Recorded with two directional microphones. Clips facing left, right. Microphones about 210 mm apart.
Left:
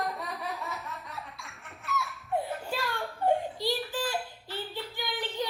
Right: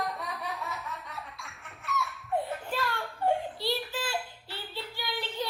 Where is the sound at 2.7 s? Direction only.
15° left (ahead or behind).